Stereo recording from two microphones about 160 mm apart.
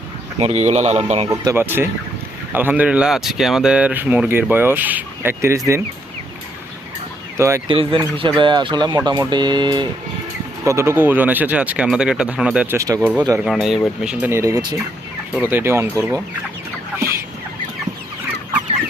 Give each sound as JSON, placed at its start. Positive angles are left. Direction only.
{"t": 0.3, "sound": "speech", "side_deg": -40}
{"t": 1.3, "sound": "speech", "side_deg": -15}
{"t": 7.3, "sound": "speech", "side_deg": -15}
{"t": 7.7, "sound": "speech", "side_deg": -35}
{"t": 12.7, "sound": "speech", "side_deg": -20}
{"t": 13.4, "sound": "speech", "side_deg": 0}